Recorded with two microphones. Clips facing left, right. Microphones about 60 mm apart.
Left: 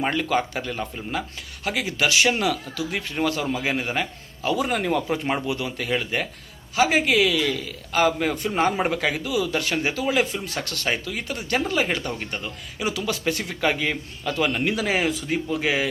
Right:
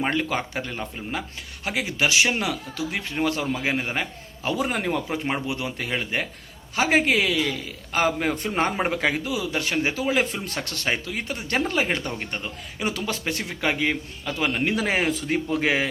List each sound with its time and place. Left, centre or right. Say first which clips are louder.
0.1 s speech: left 2 dB; centre
6.7 s speech: left 1 dB; right
14.8 s speech: even; right